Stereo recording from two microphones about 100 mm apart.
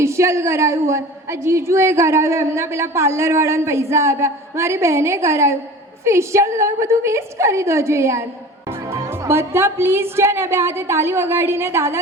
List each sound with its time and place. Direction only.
0.0 s a woman's voice: 30° right (ahead or behind)